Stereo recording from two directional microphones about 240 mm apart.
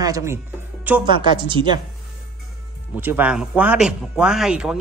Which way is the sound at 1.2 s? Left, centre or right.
Centre.